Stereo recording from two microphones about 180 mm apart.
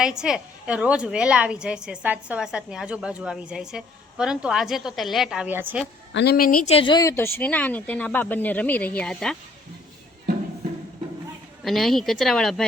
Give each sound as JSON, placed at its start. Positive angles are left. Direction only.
{"t": 0.0, "sound": "a woman's voice", "side_deg": -5}
{"t": 6.1, "sound": "a woman's voice", "side_deg": 60}
{"t": 6.7, "sound": "speech", "side_deg": 30}
{"t": 11.6, "sound": "a woman's voice", "side_deg": 0}